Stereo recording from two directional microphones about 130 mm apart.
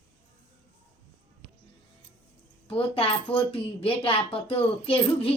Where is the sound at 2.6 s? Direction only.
45° left (ahead or behind).